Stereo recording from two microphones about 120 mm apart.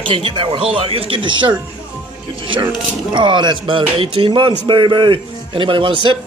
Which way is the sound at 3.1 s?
40° right (ahead or behind).